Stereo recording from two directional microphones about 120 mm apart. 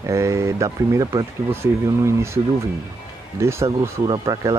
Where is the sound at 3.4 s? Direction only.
25° right (ahead or behind).